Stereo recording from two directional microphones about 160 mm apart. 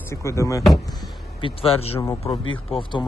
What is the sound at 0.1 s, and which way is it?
Speech, 20° left (ahead or behind).